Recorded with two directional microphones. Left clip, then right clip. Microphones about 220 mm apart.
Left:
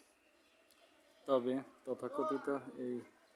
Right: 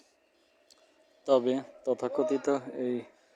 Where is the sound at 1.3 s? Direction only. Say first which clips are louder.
Right 9 dB; 25° right (ahead or behind).